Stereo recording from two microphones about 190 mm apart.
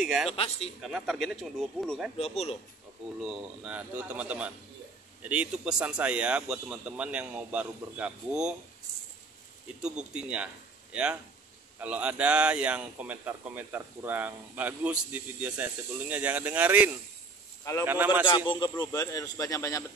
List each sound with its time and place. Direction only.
0.3 s speech: 30° left (ahead or behind)
0.7 s speech: centre (ahead or behind)
2.1 s speech: 35° left (ahead or behind)
3.2 s speech: 5° right (ahead or behind)
9.8 s speech: 5° right (ahead or behind)
18.5 s a man's voice: 20° left (ahead or behind)